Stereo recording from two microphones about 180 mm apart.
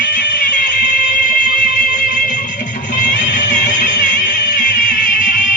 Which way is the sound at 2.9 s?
45° left (ahead or behind).